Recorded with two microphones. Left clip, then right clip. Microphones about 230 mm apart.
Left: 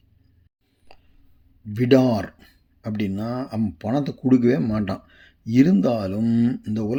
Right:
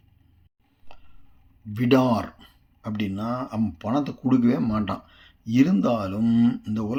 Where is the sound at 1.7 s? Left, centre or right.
Left.